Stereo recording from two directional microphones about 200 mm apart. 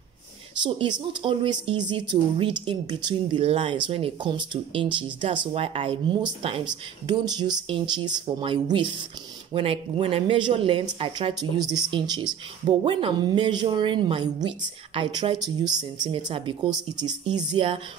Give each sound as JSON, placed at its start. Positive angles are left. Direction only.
{"t": 0.6, "sound": "speech", "side_deg": -25}